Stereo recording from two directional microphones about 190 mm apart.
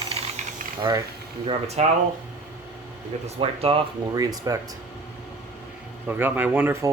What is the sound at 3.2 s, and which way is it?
Speech, 30° right (ahead or behind).